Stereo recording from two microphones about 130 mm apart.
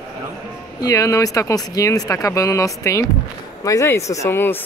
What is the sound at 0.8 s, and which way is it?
Speech, 25° left (ahead or behind).